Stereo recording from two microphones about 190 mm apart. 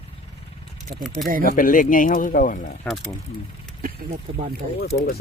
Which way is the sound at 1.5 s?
45° left (ahead or behind).